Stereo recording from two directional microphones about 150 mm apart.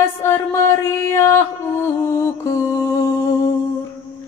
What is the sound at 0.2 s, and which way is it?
Music, 20° left (ahead or behind).